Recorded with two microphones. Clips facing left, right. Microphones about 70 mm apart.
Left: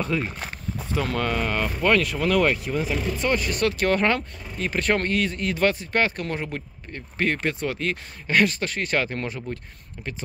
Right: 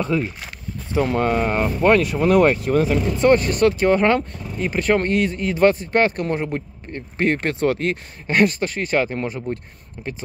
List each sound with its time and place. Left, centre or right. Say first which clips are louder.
0.9 s speech: right 6 dB; right
2.7 s speech: right 7 dB; right
3.8 s speech: right 5 dB; centre
7.3 s speech: right 6 dB; right
7.9 s speech: right 1 dB; right
8.5 s speech: right 4 dB; centre